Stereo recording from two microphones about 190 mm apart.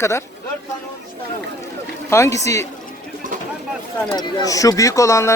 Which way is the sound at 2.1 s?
15° left (ahead or behind).